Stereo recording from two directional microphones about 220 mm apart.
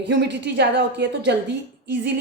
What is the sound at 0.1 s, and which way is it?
A woman's voice, 50° right (ahead or behind).